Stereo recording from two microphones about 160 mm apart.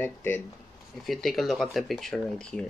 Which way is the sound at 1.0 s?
Centre (ahead or behind).